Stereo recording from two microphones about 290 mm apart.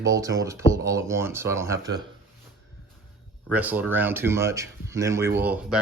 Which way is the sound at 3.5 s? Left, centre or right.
Centre.